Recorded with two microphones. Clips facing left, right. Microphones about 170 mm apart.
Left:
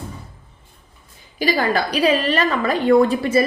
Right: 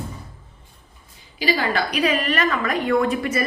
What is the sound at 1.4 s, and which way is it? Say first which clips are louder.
A woman's voice: left 3 dB; 45° left (ahead or behind).